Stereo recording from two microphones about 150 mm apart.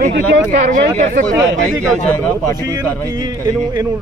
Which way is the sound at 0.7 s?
65° right (ahead or behind).